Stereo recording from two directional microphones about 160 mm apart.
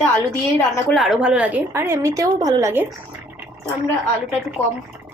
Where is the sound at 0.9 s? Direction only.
Centre (ahead or behind); by 2.8 s 20° right (ahead or behind).